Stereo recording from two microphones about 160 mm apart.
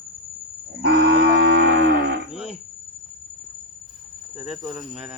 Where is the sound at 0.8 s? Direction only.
90° right.